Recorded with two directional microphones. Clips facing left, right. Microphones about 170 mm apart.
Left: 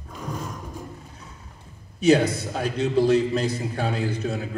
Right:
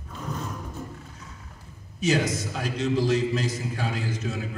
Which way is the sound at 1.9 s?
60° left (ahead or behind).